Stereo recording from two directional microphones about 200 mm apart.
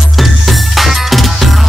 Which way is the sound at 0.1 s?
Centre (ahead or behind).